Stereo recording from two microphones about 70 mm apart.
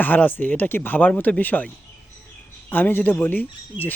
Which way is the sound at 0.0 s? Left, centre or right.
Left.